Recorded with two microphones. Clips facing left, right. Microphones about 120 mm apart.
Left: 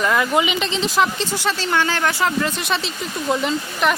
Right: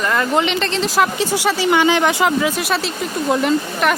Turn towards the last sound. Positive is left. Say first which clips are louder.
# right 3 dB
turn(degrees=0)  # may be behind; listen again after turning